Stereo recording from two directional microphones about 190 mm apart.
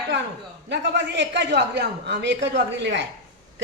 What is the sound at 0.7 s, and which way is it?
A woman's voice, 70° right (ahead or behind).